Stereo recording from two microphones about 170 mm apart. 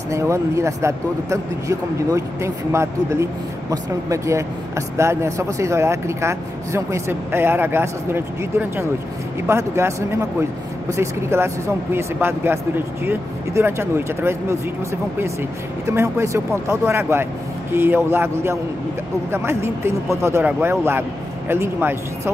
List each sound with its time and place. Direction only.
0.1 s speech: 15° right (ahead or behind)
15.9 s speech: 15° right (ahead or behind)